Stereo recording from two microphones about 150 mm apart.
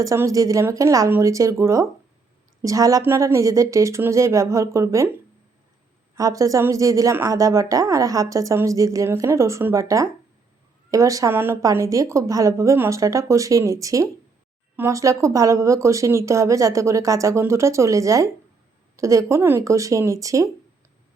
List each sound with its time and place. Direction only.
0.0 s a woman's voice: 20° right (ahead or behind)
6.1 s a woman's voice: 20° right (ahead or behind)